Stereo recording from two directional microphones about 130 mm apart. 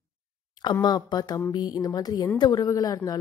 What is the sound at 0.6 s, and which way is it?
Speech, 35° left (ahead or behind).